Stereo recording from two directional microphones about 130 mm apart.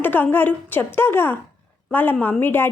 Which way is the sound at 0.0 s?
15° left (ahead or behind).